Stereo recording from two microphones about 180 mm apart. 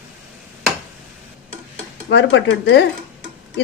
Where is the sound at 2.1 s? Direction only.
80° left.